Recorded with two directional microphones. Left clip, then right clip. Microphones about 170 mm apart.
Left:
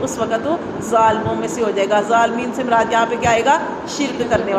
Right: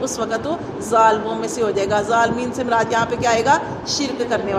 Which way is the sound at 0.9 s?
35° right (ahead or behind).